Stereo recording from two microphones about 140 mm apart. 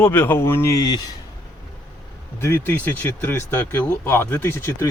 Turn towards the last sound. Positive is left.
turn(degrees=15)  # may be behind; listen again after turning